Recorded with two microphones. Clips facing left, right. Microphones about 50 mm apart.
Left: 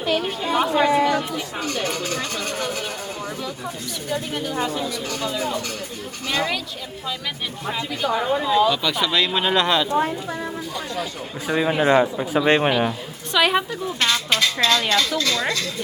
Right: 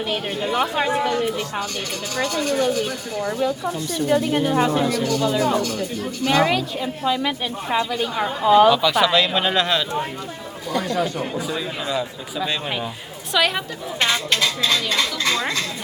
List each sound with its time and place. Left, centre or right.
0.6 s speech: centre
4.1 s a woman's voice: right
6.2 s a woman's voice: right
8.4 s speech: right
8.7 s speech: centre
11.4 s a man's voice: left
13.3 s a woman's voice: centre
14.3 s speech: centre
15.2 s speech: right